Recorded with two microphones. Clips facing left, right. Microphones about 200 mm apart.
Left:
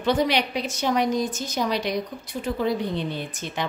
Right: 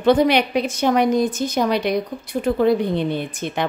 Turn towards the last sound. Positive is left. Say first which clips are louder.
# right 6 dB
turn(degrees=-60)  # may be behind; listen again after turning